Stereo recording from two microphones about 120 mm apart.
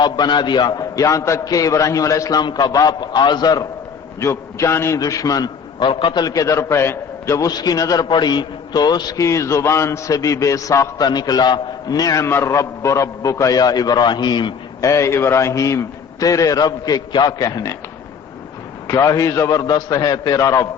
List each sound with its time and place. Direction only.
0.0 s a man's voice: 40° left (ahead or behind)
14.8 s a man's voice: 25° left (ahead or behind)
18.9 s a man's voice: 30° left (ahead or behind)